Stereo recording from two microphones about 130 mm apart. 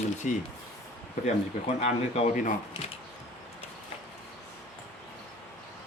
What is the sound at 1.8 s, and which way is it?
Speech, 65° left (ahead or behind).